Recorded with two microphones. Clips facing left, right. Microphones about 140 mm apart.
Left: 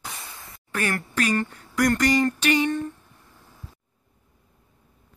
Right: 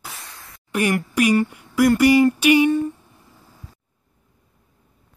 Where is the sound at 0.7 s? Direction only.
15° right (ahead or behind).